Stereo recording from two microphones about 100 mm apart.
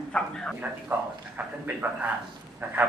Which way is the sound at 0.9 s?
20° right (ahead or behind).